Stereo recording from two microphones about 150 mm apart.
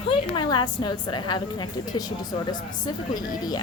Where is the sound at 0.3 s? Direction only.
30° left (ahead or behind).